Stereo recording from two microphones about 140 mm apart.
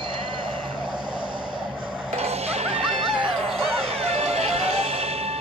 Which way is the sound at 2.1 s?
45° right (ahead or behind).